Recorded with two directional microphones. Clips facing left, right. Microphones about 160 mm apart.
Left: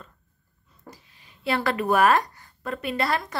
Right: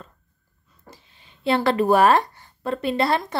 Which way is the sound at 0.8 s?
25° right (ahead or behind).